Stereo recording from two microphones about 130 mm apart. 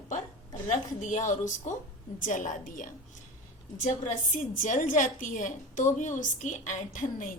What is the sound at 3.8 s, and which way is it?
A woman's voice, 75° left (ahead or behind).